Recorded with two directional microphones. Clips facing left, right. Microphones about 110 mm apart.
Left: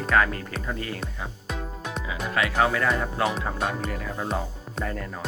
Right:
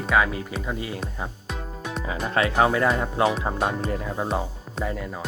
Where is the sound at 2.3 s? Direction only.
30° right (ahead or behind).